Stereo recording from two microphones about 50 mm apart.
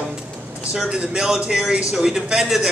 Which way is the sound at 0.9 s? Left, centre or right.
Centre.